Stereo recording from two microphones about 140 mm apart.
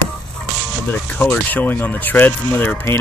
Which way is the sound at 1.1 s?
10° left (ahead or behind).